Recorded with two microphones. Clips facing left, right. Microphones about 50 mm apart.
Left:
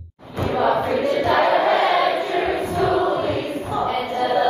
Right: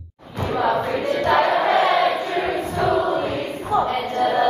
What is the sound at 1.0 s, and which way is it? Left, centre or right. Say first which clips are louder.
Choir: even; centre.